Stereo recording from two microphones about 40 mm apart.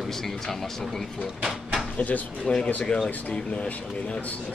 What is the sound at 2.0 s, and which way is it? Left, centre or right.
Speech, left.